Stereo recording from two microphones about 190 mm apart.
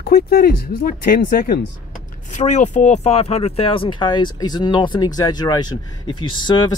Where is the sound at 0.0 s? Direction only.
55° left (ahead or behind).